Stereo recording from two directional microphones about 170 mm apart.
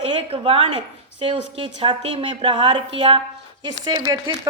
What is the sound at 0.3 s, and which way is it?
A woman's voice, 30° right (ahead or behind).